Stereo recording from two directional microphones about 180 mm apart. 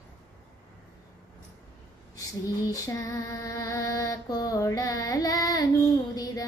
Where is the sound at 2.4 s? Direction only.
20° left (ahead or behind).